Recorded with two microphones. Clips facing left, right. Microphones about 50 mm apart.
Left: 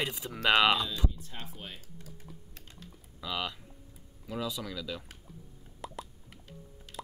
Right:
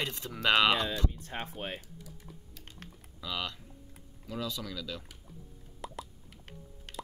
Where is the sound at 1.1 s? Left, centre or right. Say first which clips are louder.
Right 4 dB; right.